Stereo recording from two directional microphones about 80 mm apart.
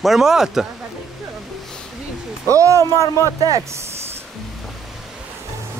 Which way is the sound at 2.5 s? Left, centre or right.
Right.